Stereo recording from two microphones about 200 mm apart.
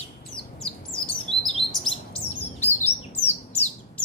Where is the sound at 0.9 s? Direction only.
Centre (ahead or behind).